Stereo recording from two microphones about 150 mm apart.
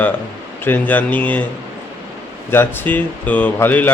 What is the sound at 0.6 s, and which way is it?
Speech, 10° left (ahead or behind).